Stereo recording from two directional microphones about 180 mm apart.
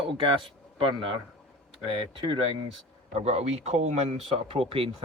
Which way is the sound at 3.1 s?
35° right (ahead or behind).